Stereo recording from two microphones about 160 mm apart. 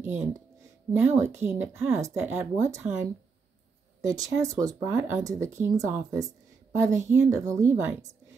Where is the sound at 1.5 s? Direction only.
15° right (ahead or behind).